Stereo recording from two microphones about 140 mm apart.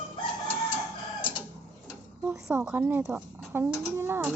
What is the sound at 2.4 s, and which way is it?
Speech, 20° right (ahead or behind).